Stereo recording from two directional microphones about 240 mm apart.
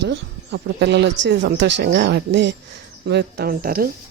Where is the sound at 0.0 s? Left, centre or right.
Right.